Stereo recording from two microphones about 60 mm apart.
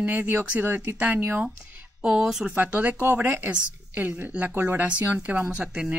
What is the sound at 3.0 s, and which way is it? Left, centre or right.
A woman's voice, right.